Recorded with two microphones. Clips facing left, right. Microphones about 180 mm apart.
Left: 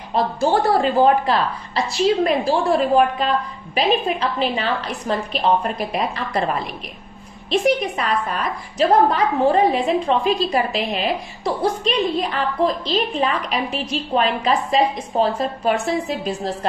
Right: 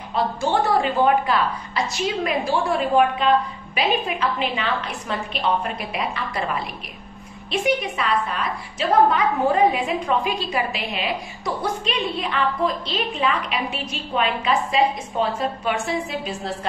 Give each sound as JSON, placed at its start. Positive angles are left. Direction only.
{"t": 0.1, "sound": "a woman's voice", "side_deg": 40}